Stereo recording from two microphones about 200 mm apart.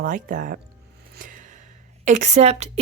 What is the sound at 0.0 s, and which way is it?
Speech, 40° right (ahead or behind).